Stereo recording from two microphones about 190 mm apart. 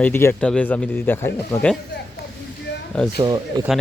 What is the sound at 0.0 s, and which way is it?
Speech, 10° left (ahead or behind).